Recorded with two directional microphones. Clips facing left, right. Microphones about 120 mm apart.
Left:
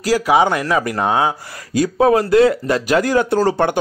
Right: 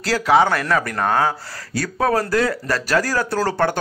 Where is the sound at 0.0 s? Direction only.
10° left (ahead or behind).